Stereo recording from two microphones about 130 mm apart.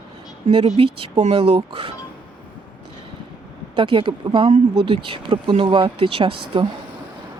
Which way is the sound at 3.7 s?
40° right (ahead or behind).